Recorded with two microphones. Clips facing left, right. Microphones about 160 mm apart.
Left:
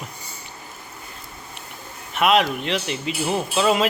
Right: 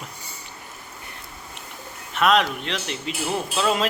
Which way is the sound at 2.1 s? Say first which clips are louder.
Left 1 dB; 10° left (ahead or behind).